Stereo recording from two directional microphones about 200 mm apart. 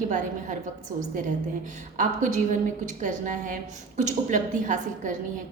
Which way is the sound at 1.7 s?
40° right (ahead or behind).